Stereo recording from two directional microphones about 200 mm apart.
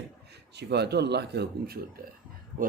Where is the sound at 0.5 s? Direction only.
55° right (ahead or behind).